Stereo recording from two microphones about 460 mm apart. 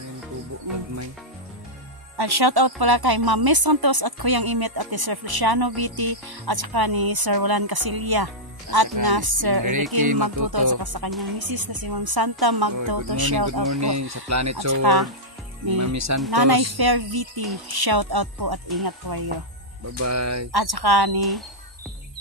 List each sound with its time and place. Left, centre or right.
2.1 s speech: right
13.7 s speech: right
14.7 s speech: right
15.8 s speech: right
16.3 s speech: right
20.0 s speech: right
20.5 s speech: right
21.2 s speech: centre